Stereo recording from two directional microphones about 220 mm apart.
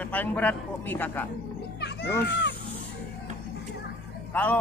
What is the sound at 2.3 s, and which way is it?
Speech, 55° left (ahead or behind).